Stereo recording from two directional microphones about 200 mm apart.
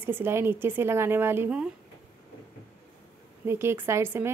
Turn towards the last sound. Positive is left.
turn(degrees=-15)  # may be behind; listen again after turning